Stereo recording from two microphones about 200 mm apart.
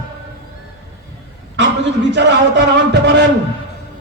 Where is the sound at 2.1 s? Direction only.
60° right (ahead or behind).